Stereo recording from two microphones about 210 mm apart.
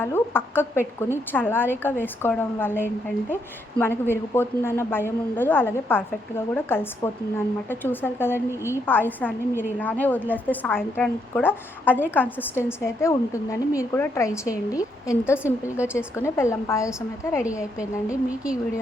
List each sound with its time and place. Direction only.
0.0 s a woman's voice: 10° left (ahead or behind)
15.8 s speech: 5° right (ahead or behind)
16.1 s a woman's voice: 15° left (ahead or behind)
17.4 s speech: 5° right (ahead or behind)